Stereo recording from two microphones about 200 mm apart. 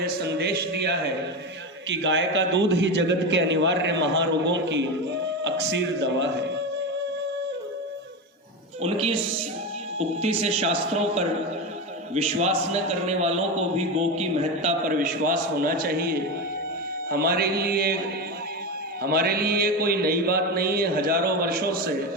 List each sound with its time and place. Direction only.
0.0 s a man's voice: 55° right (ahead or behind)
8.8 s a man's voice: 30° right (ahead or behind); by 16.1 s 50° right (ahead or behind)
17.1 s mantra: 50° right (ahead or behind)
19.0 s mantra: 50° right (ahead or behind)